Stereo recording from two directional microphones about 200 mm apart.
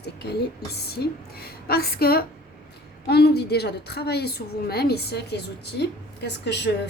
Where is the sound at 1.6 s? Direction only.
50° left (ahead or behind).